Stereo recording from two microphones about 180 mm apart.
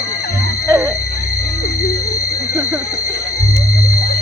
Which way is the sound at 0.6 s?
15° right (ahead or behind).